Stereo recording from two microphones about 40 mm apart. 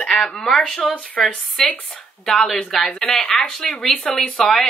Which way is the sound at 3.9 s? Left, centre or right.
Centre.